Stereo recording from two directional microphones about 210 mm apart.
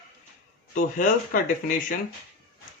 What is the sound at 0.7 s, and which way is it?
Speech, 40° left (ahead or behind).